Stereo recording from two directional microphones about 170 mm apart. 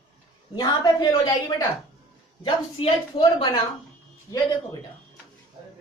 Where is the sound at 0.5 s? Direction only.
25° left (ahead or behind).